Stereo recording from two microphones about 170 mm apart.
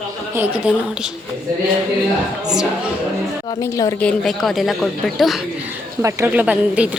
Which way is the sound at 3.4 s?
20° left (ahead or behind).